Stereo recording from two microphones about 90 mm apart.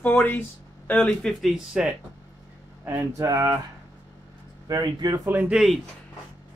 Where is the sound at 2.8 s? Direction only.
25° right (ahead or behind).